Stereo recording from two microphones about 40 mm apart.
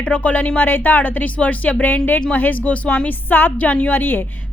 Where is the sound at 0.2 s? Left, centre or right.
Left.